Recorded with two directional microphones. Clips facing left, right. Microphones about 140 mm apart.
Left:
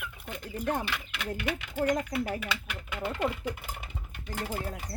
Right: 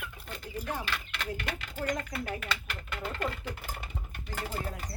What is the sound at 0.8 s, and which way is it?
Speech, 10° left (ahead or behind).